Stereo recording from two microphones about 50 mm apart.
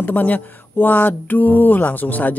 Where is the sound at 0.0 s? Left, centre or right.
Left.